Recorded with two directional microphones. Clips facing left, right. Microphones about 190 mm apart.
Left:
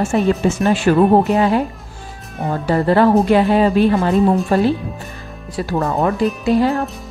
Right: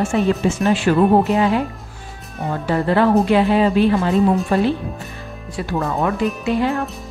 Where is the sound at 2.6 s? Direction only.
40° left (ahead or behind).